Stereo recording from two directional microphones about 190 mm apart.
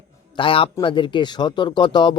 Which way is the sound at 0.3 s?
30° left (ahead or behind).